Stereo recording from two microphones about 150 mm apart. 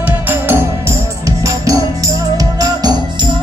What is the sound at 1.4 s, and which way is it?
Music, 25° right (ahead or behind).